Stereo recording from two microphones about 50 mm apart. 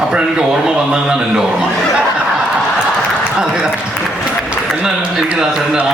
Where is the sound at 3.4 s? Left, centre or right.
Centre.